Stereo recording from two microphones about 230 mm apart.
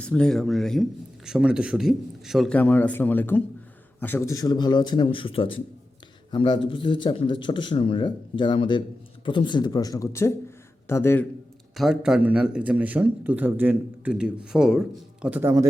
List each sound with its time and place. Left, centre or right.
0.0 s speech: centre
11.8 s speech: centre